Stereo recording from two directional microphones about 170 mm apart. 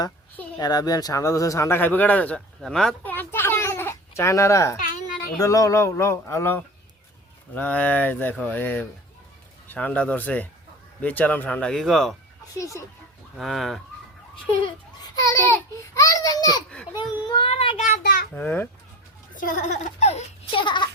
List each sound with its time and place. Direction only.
0.6 s speech: 25° left (ahead or behind)
4.8 s a sound: 60° left (ahead or behind)
5.4 s speech: 20° left (ahead or behind); by 12.1 s centre (ahead or behind)
12.5 s speech: 20° left (ahead or behind)
13.3 s speech: centre (ahead or behind)
15.1 s speech: 20° left (ahead or behind)
16.0 s a sound: 20° left (ahead or behind)
17.2 s child singing: 30° left (ahead or behind)
18.0 s a sound: 60° left (ahead or behind)
18.3 s speech: 10° left (ahead or behind)
19.3 s speech: 50° left (ahead or behind); by 20.9 s 25° left (ahead or behind)